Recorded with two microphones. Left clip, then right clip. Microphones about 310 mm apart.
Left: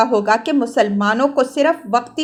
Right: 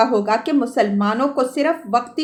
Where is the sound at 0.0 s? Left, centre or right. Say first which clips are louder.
Left 2 dB; left.